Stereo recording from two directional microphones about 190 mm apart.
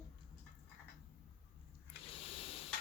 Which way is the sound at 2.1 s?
30° left (ahead or behind).